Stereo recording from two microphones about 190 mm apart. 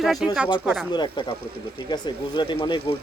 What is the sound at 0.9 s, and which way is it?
Speech, 25° left (ahead or behind).